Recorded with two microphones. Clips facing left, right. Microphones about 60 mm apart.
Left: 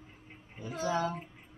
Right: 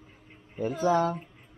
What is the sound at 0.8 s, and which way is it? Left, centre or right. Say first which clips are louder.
Speech: right 7 dB; right.